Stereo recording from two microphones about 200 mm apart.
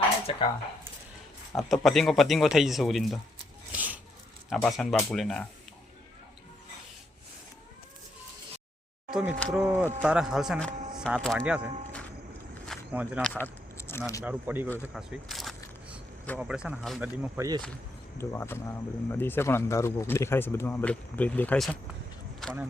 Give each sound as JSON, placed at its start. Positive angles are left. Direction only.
{"t": 0.3, "sound": "speech", "side_deg": 25}
{"t": 1.5, "sound": "speech", "side_deg": 0}
{"t": 3.7, "sound": "a sound", "side_deg": -10}
{"t": 4.4, "sound": "speech", "side_deg": 0}
{"t": 9.0, "sound": "speech", "side_deg": -5}
{"t": 12.6, "sound": "walk", "side_deg": -5}
{"t": 13.2, "sound": "a sound", "side_deg": 10}
{"t": 14.3, "sound": "speech", "side_deg": -10}
{"t": 14.8, "sound": "a sound", "side_deg": -5}
{"t": 16.4, "sound": "speech", "side_deg": -5}
{"t": 18.2, "sound": "speech", "side_deg": 10}